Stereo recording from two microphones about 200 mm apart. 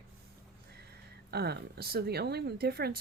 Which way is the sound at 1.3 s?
55° right (ahead or behind).